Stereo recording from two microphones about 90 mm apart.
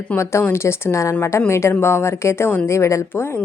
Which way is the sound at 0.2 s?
30° left (ahead or behind).